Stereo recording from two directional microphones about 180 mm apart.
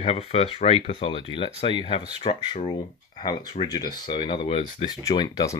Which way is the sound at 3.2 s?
25° left (ahead or behind).